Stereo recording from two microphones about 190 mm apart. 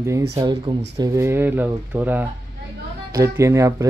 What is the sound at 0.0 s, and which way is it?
Speech, 15° right (ahead or behind).